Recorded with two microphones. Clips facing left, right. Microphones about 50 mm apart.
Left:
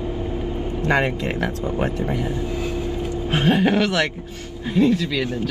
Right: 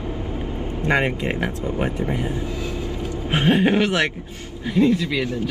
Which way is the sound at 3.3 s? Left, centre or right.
Right.